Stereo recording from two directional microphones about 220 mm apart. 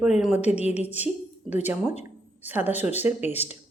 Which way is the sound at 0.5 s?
30° left (ahead or behind).